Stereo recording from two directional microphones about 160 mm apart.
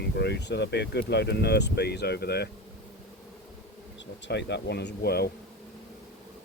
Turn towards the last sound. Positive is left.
turn(degrees=90)